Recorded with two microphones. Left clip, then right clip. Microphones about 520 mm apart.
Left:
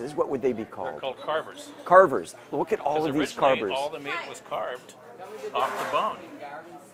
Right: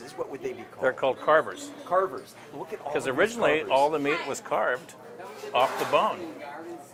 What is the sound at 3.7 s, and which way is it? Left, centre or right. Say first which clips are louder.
Speech: right 6 dB; right.